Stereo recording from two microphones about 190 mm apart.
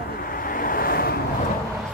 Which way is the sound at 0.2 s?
50° left (ahead or behind).